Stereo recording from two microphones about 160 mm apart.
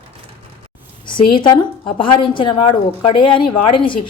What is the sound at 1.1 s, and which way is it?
A woman's voice, 30° left (ahead or behind).